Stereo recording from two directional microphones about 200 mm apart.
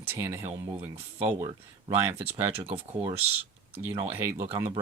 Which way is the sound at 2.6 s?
30° right (ahead or behind).